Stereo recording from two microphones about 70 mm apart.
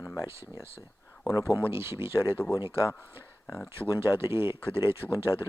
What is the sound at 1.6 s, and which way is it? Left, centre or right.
Speech, right.